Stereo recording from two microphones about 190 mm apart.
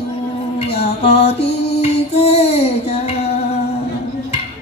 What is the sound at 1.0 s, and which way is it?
Mantra, 35° left (ahead or behind).